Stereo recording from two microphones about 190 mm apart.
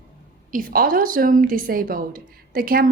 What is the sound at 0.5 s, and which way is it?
A woman's voice, 50° right (ahead or behind).